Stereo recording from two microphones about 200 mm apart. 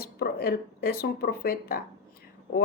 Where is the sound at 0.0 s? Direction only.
50° left (ahead or behind).